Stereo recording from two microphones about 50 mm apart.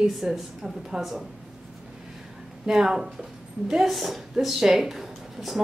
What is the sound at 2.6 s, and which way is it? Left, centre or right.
A woman's voice, centre.